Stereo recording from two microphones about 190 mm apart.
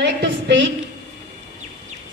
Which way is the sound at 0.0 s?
65° right (ahead or behind).